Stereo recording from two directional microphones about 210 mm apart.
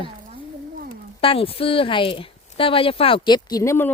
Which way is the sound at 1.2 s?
25° left (ahead or behind).